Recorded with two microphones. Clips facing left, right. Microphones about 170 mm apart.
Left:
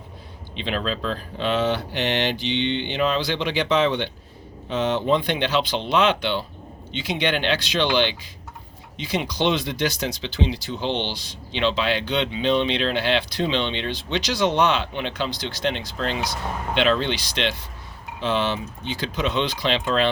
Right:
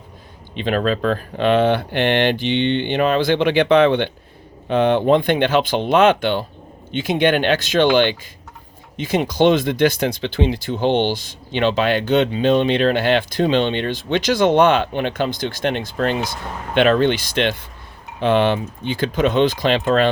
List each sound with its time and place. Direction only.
0.5 s speech: 50° right (ahead or behind)